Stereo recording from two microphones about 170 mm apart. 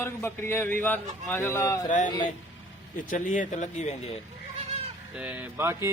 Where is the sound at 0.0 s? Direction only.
15° left (ahead or behind).